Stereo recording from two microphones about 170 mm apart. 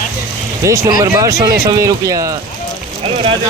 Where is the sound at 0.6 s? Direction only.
20° right (ahead or behind).